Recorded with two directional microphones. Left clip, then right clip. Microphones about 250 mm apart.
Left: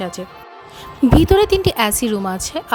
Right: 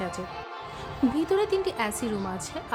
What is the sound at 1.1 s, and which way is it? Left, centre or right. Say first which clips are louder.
A woman's voice: left 13 dB; left.